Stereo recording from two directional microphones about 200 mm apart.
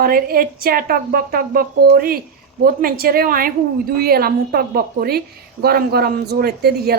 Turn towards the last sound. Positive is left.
turn(degrees=-50)  # may be behind; listen again after turning